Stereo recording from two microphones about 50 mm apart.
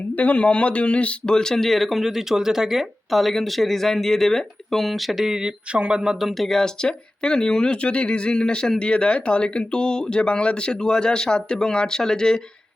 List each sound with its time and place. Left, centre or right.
0.2 s a man's voice: left; by 6.0 s centre
6.0 s speech: centre